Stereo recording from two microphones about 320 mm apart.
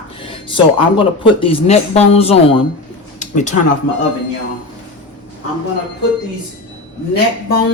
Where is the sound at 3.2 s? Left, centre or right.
Left.